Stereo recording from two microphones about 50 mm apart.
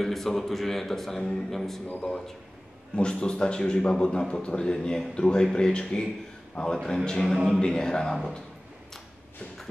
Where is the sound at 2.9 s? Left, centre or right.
Centre.